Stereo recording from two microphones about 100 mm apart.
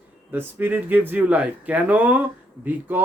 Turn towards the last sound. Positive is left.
turn(degrees=-15)  # may be behind; listen again after turning